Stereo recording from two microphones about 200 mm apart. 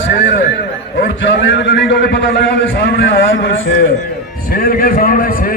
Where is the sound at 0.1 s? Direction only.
65° left (ahead or behind).